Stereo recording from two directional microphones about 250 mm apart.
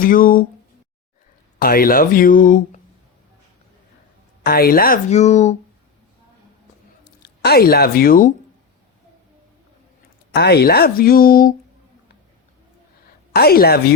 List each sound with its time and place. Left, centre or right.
0.0 s speech: left
1.5 s speech: left
4.4 s speech: left
7.4 s speech: left
10.3 s speech: left
13.3 s speech: left